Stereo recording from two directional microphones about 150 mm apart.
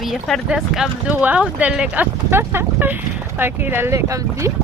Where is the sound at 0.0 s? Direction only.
Centre (ahead or behind); by 4.5 s 20° right (ahead or behind).